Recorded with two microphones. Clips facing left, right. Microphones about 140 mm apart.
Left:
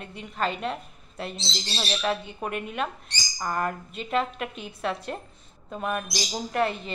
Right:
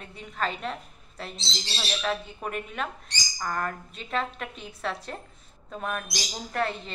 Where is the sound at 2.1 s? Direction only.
5° left (ahead or behind).